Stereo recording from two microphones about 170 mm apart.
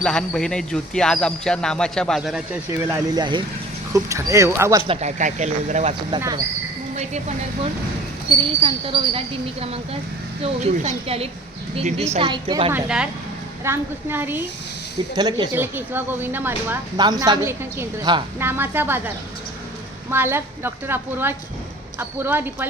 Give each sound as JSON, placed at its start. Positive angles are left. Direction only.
{"t": 0.0, "sound": "speech", "side_deg": 5}
{"t": 2.6, "sound": "a woman's voice", "side_deg": -20}
{"t": 4.9, "sound": "speech", "side_deg": -40}
{"t": 6.1, "sound": "a woman's voice", "side_deg": -20}
{"t": 6.9, "sound": "a woman's voice", "side_deg": -40}
{"t": 12.7, "sound": "a woman's voice", "side_deg": -5}
{"t": 15.1, "sound": "a woman's voice", "side_deg": -25}
{"t": 15.5, "sound": "a woman's voice", "side_deg": -10}
{"t": 17.0, "sound": "a woman's voice", "side_deg": -25}